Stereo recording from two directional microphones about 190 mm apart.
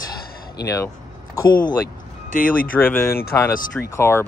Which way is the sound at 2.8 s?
10° left (ahead or behind).